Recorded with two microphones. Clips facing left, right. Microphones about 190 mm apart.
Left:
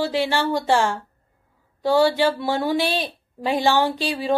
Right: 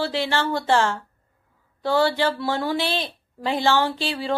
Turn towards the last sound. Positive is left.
turn(degrees=15)  # may be behind; listen again after turning